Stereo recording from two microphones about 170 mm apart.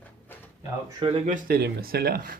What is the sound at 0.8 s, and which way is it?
Speech, 30° right (ahead or behind).